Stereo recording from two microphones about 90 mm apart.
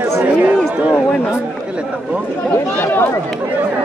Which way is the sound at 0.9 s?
15° left (ahead or behind).